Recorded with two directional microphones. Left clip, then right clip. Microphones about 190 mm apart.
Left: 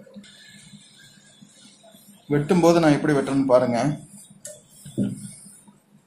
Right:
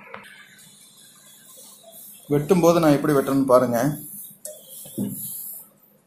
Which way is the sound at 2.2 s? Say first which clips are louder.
Right 1 dB; 5° right (ahead or behind).